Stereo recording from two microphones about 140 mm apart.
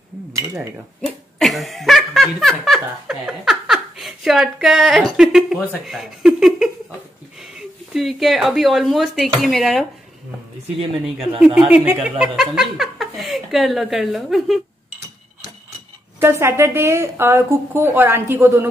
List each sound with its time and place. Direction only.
1.4 s laughter: centre (ahead or behind)
7.3 s speech: centre (ahead or behind)
11.1 s speech: 5° right (ahead or behind)
16.2 s a woman's voice: 20° right (ahead or behind)